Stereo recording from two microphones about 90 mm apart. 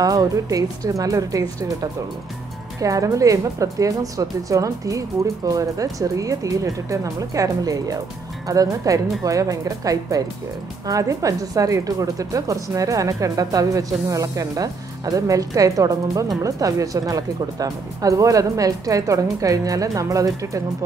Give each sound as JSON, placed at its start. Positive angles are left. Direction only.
{"t": 0.0, "sound": "speech", "side_deg": -45}